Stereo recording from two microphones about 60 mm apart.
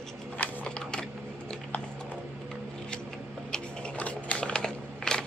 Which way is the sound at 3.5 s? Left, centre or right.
Left.